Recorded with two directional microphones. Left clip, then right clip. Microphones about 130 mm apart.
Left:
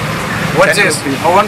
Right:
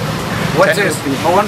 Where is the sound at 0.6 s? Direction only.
30° left (ahead or behind).